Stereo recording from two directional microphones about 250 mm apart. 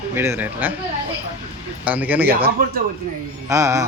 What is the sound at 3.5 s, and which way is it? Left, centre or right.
Speech, centre.